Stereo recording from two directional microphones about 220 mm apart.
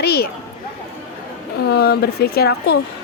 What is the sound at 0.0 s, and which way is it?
Speech, 45° left (ahead or behind).